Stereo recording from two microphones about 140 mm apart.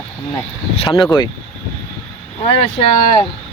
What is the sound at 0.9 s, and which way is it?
Speech, 30° left (ahead or behind).